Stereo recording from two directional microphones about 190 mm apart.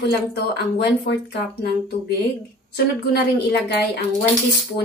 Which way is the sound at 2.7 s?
60° left (ahead or behind).